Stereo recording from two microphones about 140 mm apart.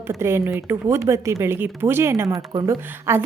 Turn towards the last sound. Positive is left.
turn(degrees=-20)  # may be behind; listen again after turning